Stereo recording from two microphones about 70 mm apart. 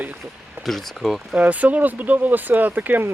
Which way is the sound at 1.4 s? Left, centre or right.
Right.